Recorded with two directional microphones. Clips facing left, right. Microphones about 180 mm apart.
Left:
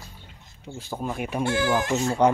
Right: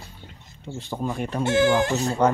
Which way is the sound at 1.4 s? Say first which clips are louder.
Right 5 dB; 25° right (ahead or behind).